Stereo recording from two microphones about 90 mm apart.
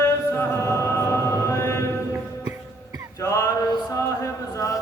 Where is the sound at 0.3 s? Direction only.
30° left (ahead or behind).